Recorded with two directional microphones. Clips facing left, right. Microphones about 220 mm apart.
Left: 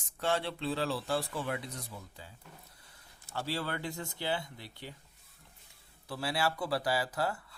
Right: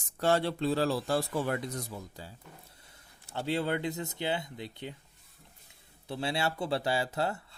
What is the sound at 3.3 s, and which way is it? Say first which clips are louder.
Speech: right 5 dB; 20° right (ahead or behind).